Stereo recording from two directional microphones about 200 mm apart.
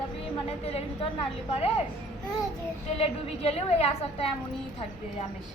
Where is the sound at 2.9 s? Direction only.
30° left (ahead or behind).